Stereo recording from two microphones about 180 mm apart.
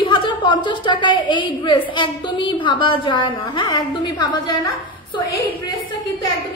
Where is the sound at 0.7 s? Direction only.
25° left (ahead or behind).